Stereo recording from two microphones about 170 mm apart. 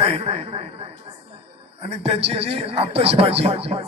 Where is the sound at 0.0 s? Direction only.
35° right (ahead or behind).